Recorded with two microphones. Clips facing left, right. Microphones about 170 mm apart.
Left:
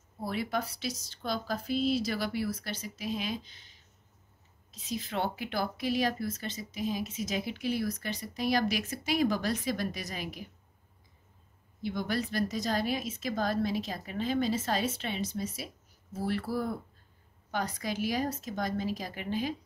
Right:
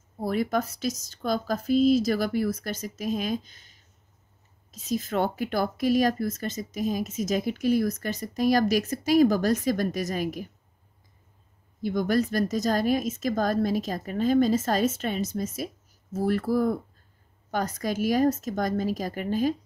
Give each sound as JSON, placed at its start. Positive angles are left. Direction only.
{"t": 0.2, "sound": "speech", "side_deg": -45}
{"t": 11.8, "sound": "speech", "side_deg": -45}